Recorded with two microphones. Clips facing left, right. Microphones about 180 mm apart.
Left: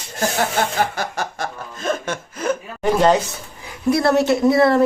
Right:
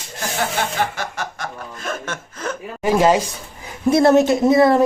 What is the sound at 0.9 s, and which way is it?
Snicker, 35° left (ahead or behind).